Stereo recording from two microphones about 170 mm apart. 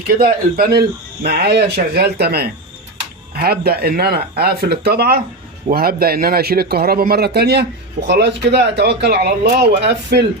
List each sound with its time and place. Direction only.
0.1 s speech: 60° right (ahead or behind); by 10.2 s 75° right (ahead or behind)